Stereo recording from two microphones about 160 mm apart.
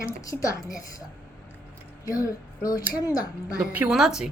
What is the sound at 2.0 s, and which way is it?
Speech, 20° left (ahead or behind).